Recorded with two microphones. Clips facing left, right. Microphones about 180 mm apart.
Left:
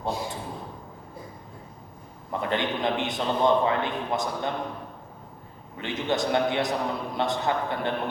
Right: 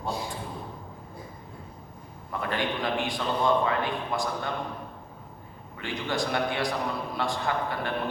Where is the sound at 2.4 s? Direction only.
20° left (ahead or behind).